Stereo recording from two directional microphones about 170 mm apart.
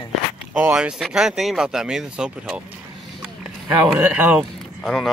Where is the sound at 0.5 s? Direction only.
10° right (ahead or behind).